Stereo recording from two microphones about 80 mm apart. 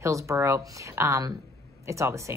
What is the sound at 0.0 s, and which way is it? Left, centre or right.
Speech, right.